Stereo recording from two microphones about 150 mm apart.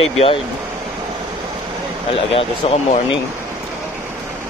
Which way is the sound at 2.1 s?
40° left (ahead or behind).